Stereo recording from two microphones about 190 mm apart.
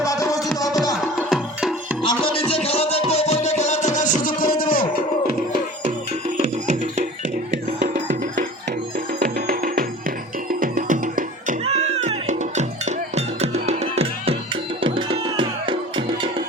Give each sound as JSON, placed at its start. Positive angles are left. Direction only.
{"t": 0.0, "sound": "music", "side_deg": 15}
{"t": 1.3, "sound": "music", "side_deg": 0}
{"t": 2.0, "sound": "music", "side_deg": 30}
{"t": 9.1, "sound": "music", "side_deg": -50}
{"t": 11.6, "sound": "music", "side_deg": -35}